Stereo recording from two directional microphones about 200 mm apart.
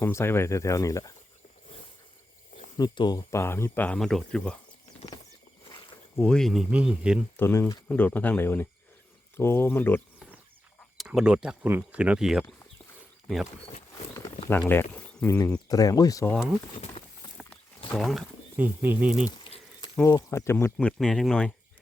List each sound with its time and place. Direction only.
0.0 s speech: 10° left (ahead or behind)
2.7 s speech: 20° left (ahead or behind); by 4.5 s 5° left (ahead or behind)
6.1 s speech: 5° left (ahead or behind)
7.3 s speech: 10° left (ahead or behind)
10.9 s speech: centre (ahead or behind)
14.7 s speech: 10° left (ahead or behind)
16.7 s speech: 30° left (ahead or behind)
17.8 s speech: centre (ahead or behind)
20.0 s speech: 15° left (ahead or behind)